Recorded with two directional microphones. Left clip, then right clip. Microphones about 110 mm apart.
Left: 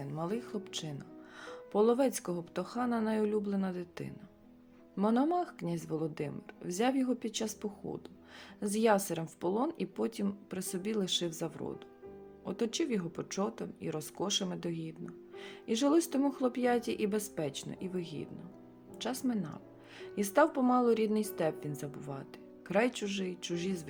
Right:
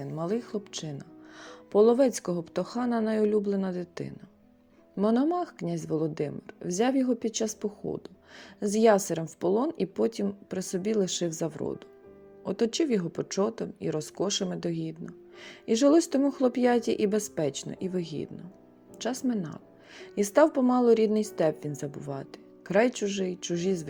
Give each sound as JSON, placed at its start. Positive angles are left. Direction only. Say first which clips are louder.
{"t": 0.2, "sound": "speech", "louder": "right 6 dB", "side_deg": -40}